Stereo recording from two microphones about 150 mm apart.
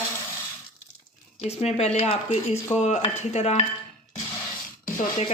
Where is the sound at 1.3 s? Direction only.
45° left (ahead or behind).